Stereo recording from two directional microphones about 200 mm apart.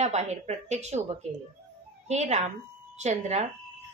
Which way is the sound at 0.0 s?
35° right (ahead or behind).